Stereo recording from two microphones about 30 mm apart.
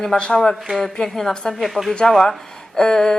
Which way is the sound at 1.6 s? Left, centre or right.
Centre.